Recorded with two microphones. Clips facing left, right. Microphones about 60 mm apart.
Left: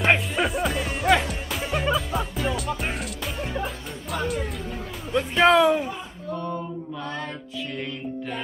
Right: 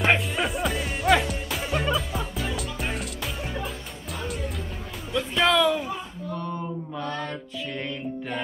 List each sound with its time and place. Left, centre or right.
0.0 s music: centre
5.1 s music: left
6.5 s mantra: centre